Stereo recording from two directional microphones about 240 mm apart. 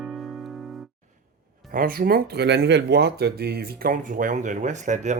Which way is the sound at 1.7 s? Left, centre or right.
Right.